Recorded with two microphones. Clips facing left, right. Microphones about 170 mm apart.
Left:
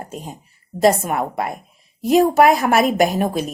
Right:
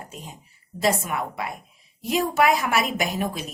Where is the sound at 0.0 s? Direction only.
45° left (ahead or behind).